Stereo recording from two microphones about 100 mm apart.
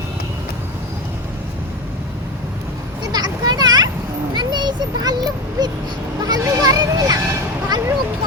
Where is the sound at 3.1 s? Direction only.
40° right (ahead or behind).